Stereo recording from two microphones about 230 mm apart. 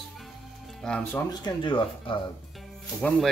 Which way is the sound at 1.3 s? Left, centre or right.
Centre.